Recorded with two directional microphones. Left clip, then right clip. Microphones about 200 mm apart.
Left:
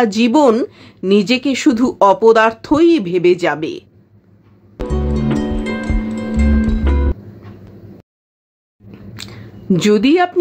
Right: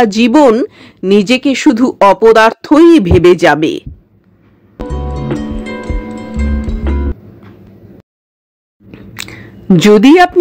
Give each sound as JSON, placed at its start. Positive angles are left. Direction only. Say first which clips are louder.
{"t": 0.0, "sound": "speech", "louder": "right 5 dB", "side_deg": -30}
{"t": 4.7, "sound": "music", "louder": "left 1 dB", "side_deg": 0}
{"t": 8.9, "sound": "a sound", "louder": "right 7 dB", "side_deg": -30}